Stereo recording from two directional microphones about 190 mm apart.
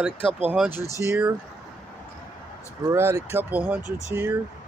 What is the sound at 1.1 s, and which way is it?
Speech, 15° right (ahead or behind).